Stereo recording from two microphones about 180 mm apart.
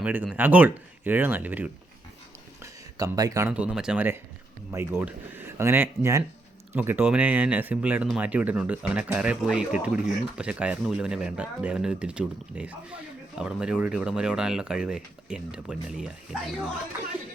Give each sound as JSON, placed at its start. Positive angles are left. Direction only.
{"t": 0.0, "sound": "speech", "side_deg": -10}
{"t": 2.6, "sound": "a sound", "side_deg": -15}
{"t": 3.5, "sound": "speech", "side_deg": -5}